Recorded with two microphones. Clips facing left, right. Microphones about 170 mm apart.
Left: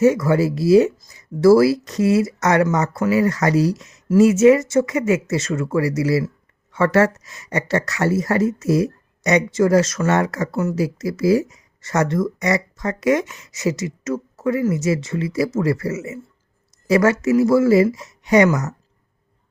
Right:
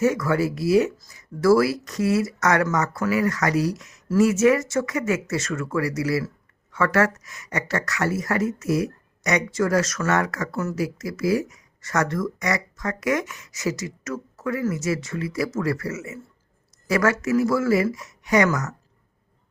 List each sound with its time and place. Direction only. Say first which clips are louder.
0.0 s speech: left 5 dB; 25° left (ahead or behind)